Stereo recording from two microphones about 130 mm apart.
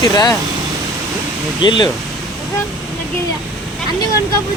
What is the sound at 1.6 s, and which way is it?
Speech, 35° left (ahead or behind).